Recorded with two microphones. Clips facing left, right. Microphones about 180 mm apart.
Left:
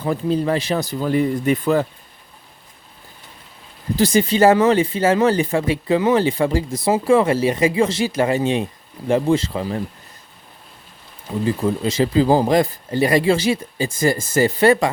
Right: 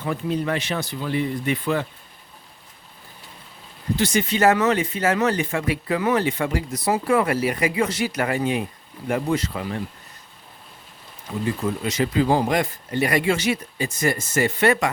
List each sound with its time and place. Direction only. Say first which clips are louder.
0.0 s speech: left 5 dB; 35° left (ahead or behind)
3.9 s speech: left 6 dB; 35° left (ahead or behind)
11.4 s speech: left 5 dB; 30° left (ahead or behind)